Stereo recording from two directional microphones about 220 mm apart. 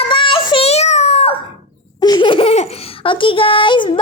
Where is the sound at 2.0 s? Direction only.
20° left (ahead or behind).